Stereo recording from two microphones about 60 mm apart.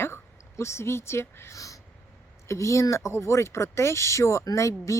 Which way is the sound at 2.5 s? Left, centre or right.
Left.